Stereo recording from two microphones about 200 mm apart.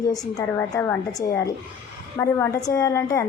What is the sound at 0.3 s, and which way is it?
A woman's voice, 10° left (ahead or behind).